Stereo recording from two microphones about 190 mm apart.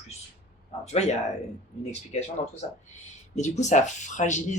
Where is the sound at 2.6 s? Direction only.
35° left (ahead or behind).